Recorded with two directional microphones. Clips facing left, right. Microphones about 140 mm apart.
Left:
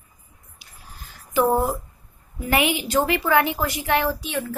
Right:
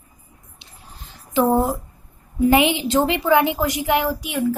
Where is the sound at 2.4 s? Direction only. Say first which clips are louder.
Right 6 dB; 20° right (ahead or behind).